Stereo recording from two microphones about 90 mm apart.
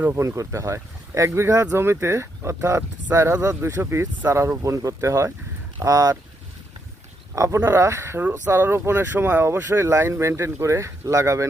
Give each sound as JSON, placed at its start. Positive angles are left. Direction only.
{"t": 0.1, "sound": "speech", "side_deg": -35}
{"t": 7.3, "sound": "speech", "side_deg": -35}